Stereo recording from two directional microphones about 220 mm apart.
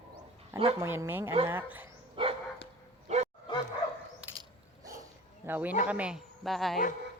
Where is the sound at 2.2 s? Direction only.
25° right (ahead or behind).